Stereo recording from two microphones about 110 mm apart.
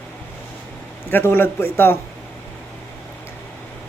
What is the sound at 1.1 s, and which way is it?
Mantra, 20° left (ahead or behind).